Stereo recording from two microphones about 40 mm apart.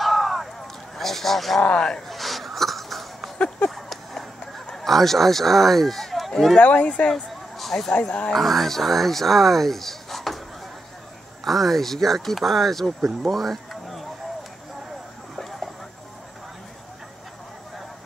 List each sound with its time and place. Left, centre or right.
0.0 s a sound: centre
1.6 s speech: left
2.0 s snort: centre
3.7 s a sound: centre
4.7 s speech: centre
6.6 s speech: left
7.1 s a sound: centre
8.0 s speech: left
8.3 s speech: centre
11.4 s speech: centre
13.3 s a sound: centre
15.3 s vehicle: centre